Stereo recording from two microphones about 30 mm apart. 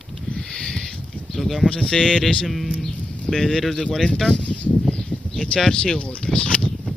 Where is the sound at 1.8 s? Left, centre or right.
Left.